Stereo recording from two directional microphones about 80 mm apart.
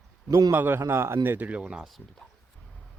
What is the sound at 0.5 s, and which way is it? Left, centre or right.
Speech, right.